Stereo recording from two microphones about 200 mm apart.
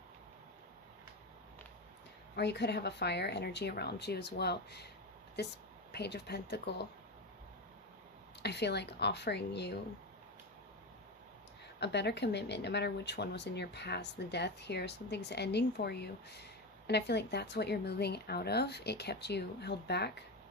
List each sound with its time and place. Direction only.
2.3 s speech: 55° left (ahead or behind)
8.4 s speech: 55° left (ahead or behind)
11.8 s speech: 60° left (ahead or behind)